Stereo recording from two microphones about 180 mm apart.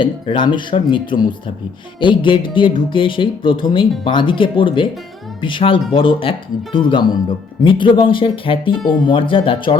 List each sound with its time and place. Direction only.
0.0 s speech: 25° left (ahead or behind)